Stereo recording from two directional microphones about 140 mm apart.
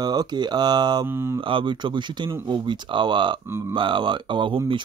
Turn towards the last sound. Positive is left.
turn(degrees=-35)  # may be behind; listen again after turning